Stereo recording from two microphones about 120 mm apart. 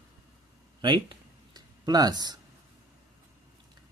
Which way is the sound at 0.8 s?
40° right (ahead or behind).